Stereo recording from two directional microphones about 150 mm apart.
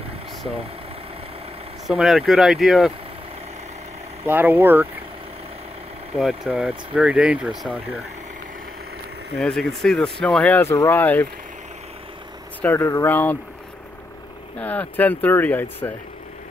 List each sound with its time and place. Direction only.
1.9 s speech: centre (ahead or behind)
4.3 s speech: 15° right (ahead or behind)
6.1 s speech: centre (ahead or behind)
9.4 s speech: centre (ahead or behind)
12.6 s speech: 20° left (ahead or behind)
14.6 s speech: 10° left (ahead or behind)